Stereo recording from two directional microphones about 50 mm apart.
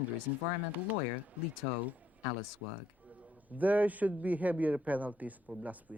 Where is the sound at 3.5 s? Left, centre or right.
Right.